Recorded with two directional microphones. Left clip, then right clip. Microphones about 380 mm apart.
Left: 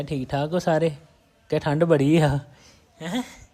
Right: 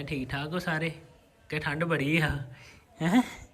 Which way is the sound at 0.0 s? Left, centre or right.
Centre.